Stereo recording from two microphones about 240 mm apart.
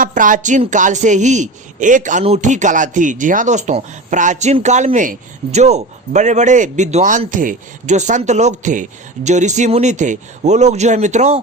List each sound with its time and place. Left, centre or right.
0.0 s a man's voice: right